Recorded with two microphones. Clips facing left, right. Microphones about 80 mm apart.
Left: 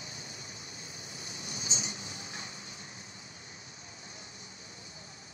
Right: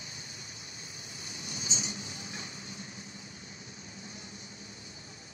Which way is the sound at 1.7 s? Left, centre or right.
Left.